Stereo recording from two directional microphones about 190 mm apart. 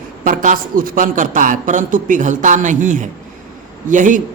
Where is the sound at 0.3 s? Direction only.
45° right (ahead or behind).